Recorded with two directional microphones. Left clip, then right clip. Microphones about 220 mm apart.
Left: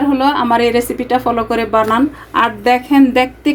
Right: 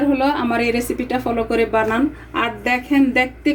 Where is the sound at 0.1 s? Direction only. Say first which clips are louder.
Left 5 dB; 25° left (ahead or behind).